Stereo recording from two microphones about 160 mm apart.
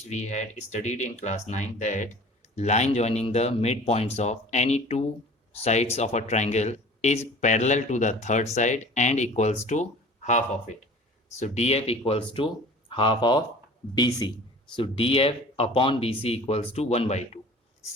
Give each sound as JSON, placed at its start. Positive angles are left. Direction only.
{"t": 0.0, "sound": "speech", "side_deg": 45}
{"t": 14.8, "sound": "speech", "side_deg": 35}